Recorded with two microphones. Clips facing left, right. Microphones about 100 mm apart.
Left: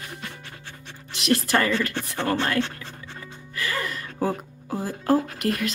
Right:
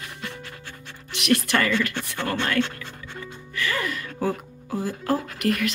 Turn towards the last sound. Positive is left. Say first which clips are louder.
# right 1 dB
turn(degrees=30)  # may be behind; listen again after turning